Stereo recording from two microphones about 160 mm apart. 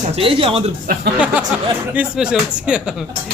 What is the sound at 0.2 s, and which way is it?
Speech, 35° right (ahead or behind).